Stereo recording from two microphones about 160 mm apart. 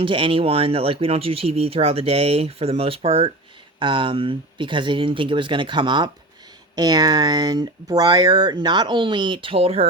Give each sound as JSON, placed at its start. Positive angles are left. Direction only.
{"t": 0.0, "sound": "speech", "side_deg": -35}